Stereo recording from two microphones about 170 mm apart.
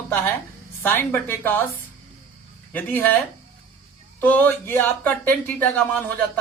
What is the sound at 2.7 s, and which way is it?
Speech, 10° left (ahead or behind).